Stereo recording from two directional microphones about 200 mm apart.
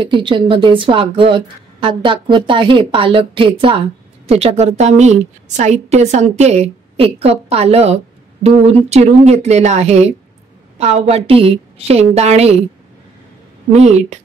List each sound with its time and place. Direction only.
0.0 s a woman's voice: 25° right (ahead or behind)
13.7 s a woman's voice: 35° right (ahead or behind)